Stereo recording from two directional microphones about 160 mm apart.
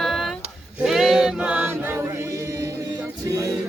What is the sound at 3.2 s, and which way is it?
Music, 20° right (ahead or behind).